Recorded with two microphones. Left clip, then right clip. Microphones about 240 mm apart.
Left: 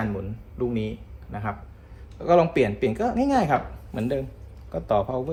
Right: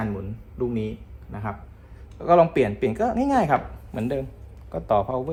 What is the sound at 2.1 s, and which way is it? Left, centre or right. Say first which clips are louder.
A woman's voice: right 2 dB; right.